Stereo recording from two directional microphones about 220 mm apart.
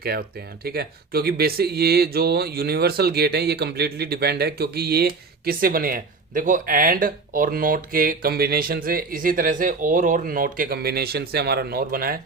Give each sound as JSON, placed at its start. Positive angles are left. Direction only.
{"t": 0.0, "sound": "speech", "side_deg": -45}